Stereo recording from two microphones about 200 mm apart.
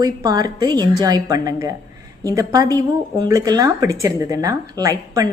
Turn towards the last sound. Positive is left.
turn(degrees=-15)  # may be behind; listen again after turning